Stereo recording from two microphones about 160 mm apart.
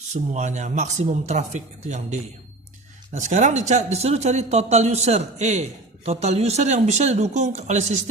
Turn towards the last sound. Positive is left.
turn(degrees=-45)  # may be behind; listen again after turning